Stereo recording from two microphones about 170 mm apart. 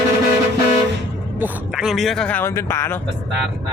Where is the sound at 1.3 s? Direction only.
5° right (ahead or behind); by 3.0 s 15° left (ahead or behind).